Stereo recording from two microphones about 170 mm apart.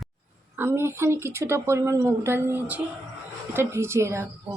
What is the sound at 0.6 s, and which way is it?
Speech, 15° right (ahead or behind).